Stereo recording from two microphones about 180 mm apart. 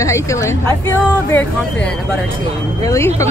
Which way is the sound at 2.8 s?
15° left (ahead or behind).